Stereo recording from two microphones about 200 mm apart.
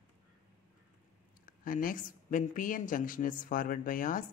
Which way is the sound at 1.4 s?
45° left (ahead or behind).